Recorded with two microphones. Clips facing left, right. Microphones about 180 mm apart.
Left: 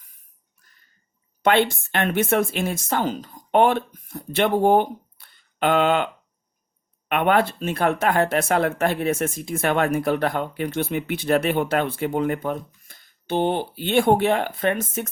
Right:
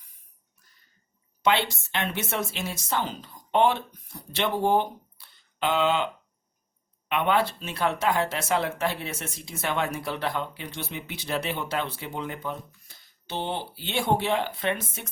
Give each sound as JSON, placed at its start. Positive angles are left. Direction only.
{"t": 1.4, "sound": "speech", "side_deg": 55}
{"t": 7.1, "sound": "speech", "side_deg": 55}